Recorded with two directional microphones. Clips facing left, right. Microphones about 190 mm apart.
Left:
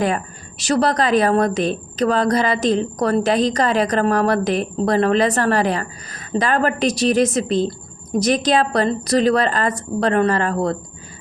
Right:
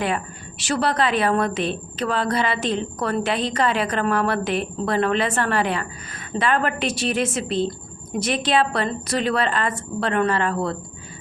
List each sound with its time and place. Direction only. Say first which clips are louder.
0.6 s a woman's voice: left 4 dB; 40° left (ahead or behind)